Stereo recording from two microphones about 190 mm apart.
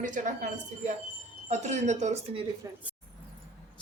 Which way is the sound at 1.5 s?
35° right (ahead or behind).